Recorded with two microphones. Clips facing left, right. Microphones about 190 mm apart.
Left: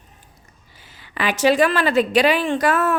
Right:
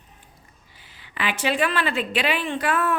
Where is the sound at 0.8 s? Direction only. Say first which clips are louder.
Left 4 dB; 40° left (ahead or behind).